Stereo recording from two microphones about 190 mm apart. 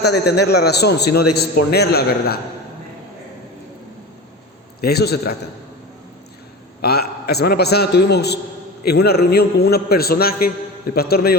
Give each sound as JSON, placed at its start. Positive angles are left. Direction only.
{"t": 0.0, "sound": "a man's voice", "side_deg": 60}
{"t": 4.8, "sound": "a man's voice", "side_deg": 55}
{"t": 6.8, "sound": "a man's voice", "side_deg": 55}